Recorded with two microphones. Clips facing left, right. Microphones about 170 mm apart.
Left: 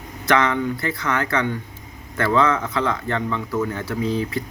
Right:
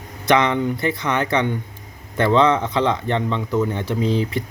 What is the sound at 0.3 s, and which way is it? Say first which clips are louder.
Speech: right 2 dB; 20° right (ahead or behind).